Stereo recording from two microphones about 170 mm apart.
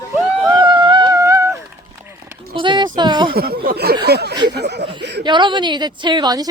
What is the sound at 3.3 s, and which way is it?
Speech, 60° right (ahead or behind).